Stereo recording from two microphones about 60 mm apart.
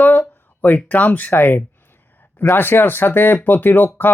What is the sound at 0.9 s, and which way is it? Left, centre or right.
Speech, left.